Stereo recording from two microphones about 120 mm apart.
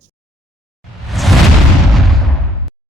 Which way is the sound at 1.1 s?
Centre (ahead or behind).